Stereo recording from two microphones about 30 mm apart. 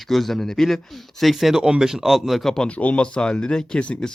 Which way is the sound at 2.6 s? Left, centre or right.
Left.